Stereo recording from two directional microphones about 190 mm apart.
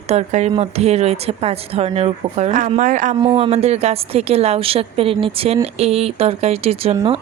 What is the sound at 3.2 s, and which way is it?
A woman's voice, 25° right (ahead or behind).